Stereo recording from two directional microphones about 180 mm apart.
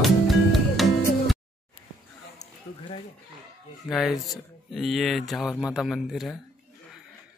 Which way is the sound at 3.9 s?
Centre (ahead or behind).